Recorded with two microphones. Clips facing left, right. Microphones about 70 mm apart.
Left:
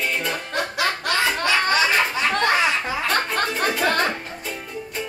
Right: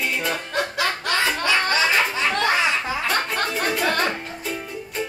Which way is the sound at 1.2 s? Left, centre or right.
Centre.